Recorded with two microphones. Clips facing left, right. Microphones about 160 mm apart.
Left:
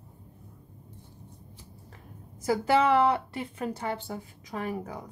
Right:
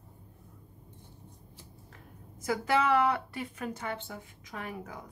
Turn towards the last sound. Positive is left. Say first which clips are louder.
# left 7 dB
turn(degrees=35)  # may be behind; listen again after turning